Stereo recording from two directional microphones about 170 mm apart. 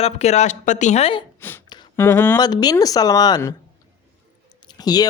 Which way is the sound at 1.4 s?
10° left (ahead or behind).